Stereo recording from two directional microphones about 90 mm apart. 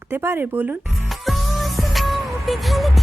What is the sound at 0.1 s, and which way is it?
Speech, 25° right (ahead or behind).